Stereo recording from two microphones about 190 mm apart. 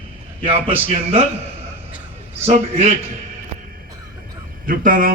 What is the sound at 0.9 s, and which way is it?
Speech, 30° right (ahead or behind).